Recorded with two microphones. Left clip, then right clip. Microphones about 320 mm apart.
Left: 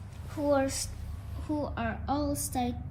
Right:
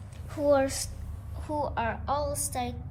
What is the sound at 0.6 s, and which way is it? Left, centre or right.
A woman's voice, right.